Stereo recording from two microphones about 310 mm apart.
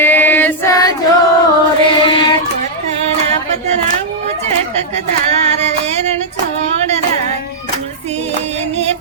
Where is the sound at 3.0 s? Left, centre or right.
Right.